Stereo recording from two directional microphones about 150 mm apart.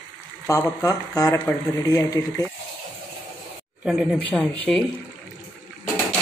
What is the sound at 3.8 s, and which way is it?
Speech, 5° left (ahead or behind).